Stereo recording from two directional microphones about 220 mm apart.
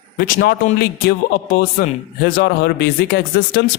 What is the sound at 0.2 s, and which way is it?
A man's voice, 40° left (ahead or behind).